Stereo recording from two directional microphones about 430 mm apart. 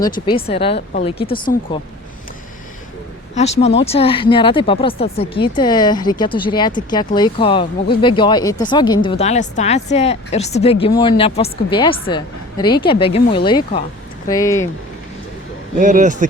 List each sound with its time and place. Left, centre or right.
0.1 s speech: centre
3.3 s speech: centre
15.8 s speech: centre